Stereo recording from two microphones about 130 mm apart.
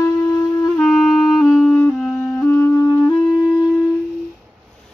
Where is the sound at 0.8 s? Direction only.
Centre (ahead or behind); by 3.1 s 15° left (ahead or behind).